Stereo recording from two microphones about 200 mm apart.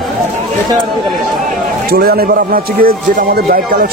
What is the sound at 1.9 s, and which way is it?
A man's voice, 50° right (ahead or behind).